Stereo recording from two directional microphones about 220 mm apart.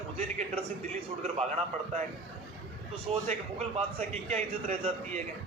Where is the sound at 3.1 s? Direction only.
25° right (ahead or behind).